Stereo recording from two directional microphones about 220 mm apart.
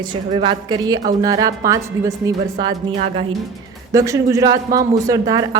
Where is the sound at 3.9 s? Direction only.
15° right (ahead or behind).